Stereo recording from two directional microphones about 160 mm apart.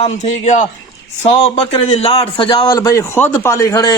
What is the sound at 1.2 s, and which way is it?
A man's voice, 35° left (ahead or behind).